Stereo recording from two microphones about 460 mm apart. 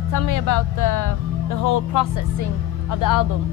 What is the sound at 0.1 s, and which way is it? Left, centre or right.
Speech, left.